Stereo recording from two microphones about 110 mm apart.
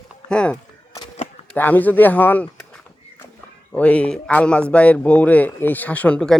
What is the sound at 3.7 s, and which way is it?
Speech, 10° left (ahead or behind).